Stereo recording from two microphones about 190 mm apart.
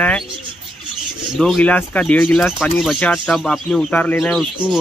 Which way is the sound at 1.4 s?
5° left (ahead or behind).